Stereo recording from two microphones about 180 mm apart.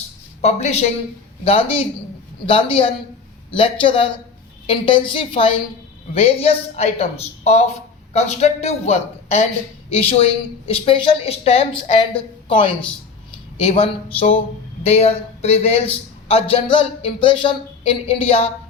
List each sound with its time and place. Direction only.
0.4 s a woman's voice: 35° left (ahead or behind)
14.8 s speech: 35° left (ahead or behind)